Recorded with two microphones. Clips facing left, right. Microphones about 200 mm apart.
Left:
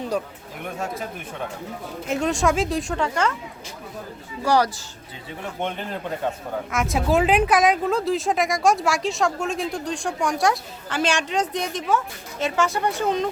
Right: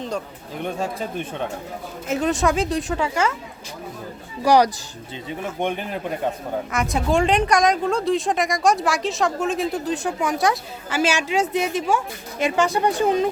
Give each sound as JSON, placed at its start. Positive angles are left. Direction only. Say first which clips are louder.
{"t": 0.6, "sound": "speech", "louder": "right 3 dB", "side_deg": -30}
{"t": 2.0, "sound": "speech", "louder": "right 1 dB", "side_deg": 0}
{"t": 4.4, "sound": "speech", "louder": "right 4 dB", "side_deg": -15}
{"t": 6.7, "sound": "speech", "louder": "left 1 dB", "side_deg": 0}